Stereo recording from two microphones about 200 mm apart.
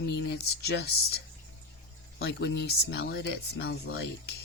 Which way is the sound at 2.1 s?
55° left (ahead or behind).